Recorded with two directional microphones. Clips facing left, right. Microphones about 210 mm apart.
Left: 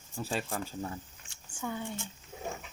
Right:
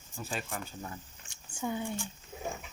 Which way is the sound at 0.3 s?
35° left (ahead or behind).